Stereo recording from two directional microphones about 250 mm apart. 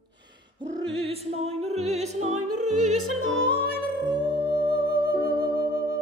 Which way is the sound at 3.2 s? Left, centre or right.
Right.